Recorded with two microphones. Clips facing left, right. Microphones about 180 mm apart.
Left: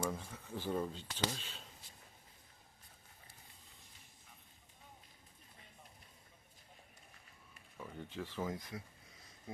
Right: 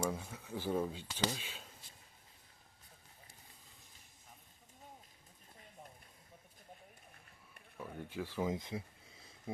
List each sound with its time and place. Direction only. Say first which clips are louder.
0.1 s speech: right 2 dB; 5° right (ahead or behind)
7.8 s speech: right 2 dB; 10° right (ahead or behind)
8.4 s speech: right 4 dB; 25° right (ahead or behind)